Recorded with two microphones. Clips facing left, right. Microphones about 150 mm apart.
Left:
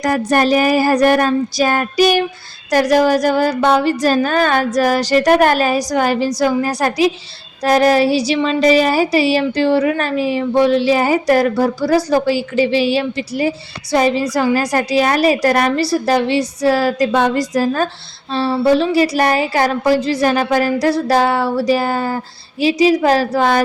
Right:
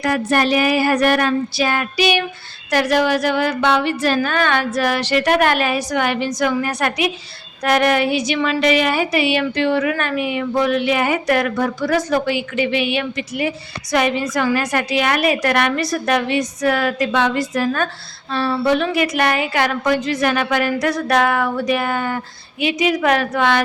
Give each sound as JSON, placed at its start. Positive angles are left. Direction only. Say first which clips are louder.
{"t": 0.0, "sound": "speech", "louder": "left 3 dB", "side_deg": 40}